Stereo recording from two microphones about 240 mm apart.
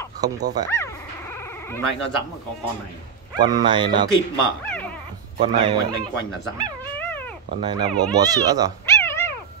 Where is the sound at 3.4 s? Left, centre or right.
Centre.